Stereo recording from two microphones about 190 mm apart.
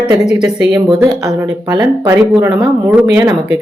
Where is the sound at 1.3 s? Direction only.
20° right (ahead or behind).